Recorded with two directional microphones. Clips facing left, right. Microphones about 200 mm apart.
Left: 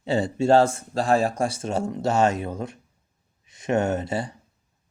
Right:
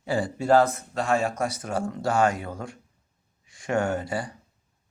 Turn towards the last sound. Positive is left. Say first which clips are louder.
# left 2 dB
turn(degrees=25)  # may be behind; listen again after turning